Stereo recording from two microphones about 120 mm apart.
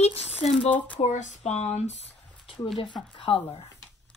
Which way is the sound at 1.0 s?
75° left (ahead or behind).